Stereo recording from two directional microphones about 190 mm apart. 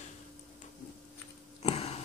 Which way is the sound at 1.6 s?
35° left (ahead or behind).